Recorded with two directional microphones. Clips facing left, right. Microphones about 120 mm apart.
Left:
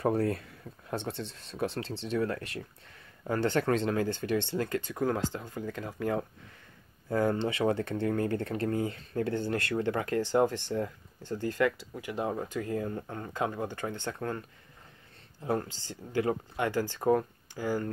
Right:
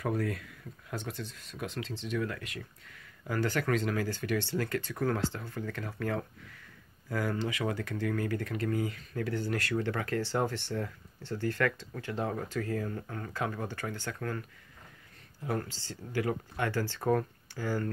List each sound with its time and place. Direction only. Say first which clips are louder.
0.0 s speech: left 5 dB; 30° left (ahead or behind)
15.4 s speech: left 3 dB; 25° left (ahead or behind)